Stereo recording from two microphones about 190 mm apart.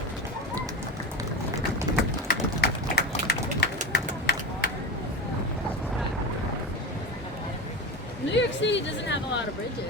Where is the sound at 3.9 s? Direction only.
55° left (ahead or behind).